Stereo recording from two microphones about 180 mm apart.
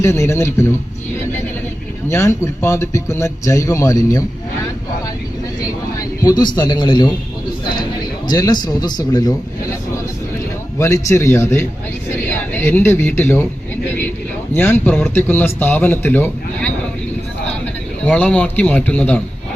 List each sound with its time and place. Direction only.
0.0 s speech: 15° left (ahead or behind)
2.0 s speech: 15° left (ahead or behind)
6.0 s a man's voice: 20° left (ahead or behind)
8.3 s a man's voice: 20° left (ahead or behind)
10.8 s a man's voice: 15° left (ahead or behind)
14.5 s speech: 10° left (ahead or behind)
18.0 s speech: 5° left (ahead or behind)